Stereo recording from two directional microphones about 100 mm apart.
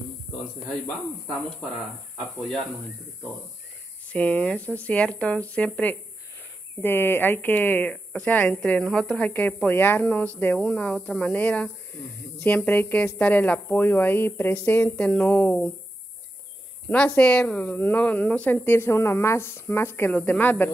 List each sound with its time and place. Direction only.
1.2 s speech: centre (ahead or behind)
4.1 s a woman's voice: 15° left (ahead or behind)
17.2 s a woman's voice: 10° left (ahead or behind)